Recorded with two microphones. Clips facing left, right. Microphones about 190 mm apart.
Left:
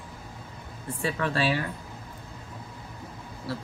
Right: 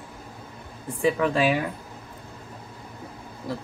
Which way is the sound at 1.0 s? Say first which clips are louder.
Right 6 dB; 15° right (ahead or behind).